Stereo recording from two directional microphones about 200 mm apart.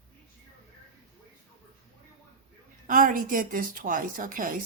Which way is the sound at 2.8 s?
40° right (ahead or behind).